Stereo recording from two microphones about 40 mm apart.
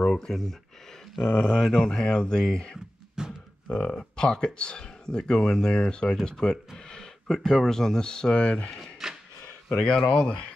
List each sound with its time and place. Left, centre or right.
0.1 s speech: centre
1.2 s speech: left
1.5 s speech: centre
3.2 s a sound: centre
3.6 s speech: left
6.9 s a sound: centre
7.4 s speech: centre
9.0 s a sound: centre
9.7 s speech: left